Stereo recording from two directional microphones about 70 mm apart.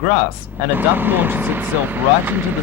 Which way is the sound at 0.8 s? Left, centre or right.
Right.